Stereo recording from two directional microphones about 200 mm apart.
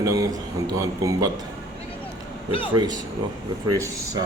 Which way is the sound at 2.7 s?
20° right (ahead or behind).